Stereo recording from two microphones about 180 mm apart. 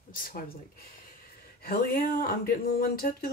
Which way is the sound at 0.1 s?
50° left (ahead or behind).